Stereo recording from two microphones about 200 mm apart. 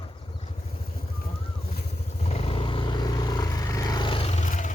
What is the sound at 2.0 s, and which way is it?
Vehicle, 35° left (ahead or behind).